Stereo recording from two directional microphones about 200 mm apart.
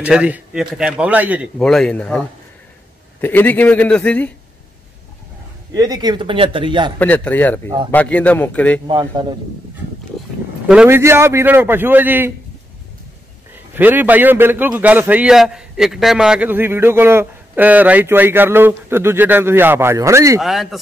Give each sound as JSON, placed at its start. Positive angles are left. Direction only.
{"t": 0.0, "sound": "a man's voice", "side_deg": -5}
{"t": 1.6, "sound": "a man's voice", "side_deg": 5}
{"t": 5.8, "sound": "speech", "side_deg": -20}
{"t": 7.0, "sound": "a man's voice", "side_deg": 10}
{"t": 8.8, "sound": "speech", "side_deg": -20}
{"t": 10.7, "sound": "a man's voice", "side_deg": -10}
{"t": 13.7, "sound": "a man's voice", "side_deg": -10}
{"t": 20.3, "sound": "a man's voice", "side_deg": 0}